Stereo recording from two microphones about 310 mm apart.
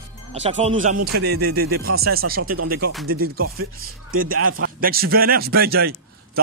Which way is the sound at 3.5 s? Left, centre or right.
Right.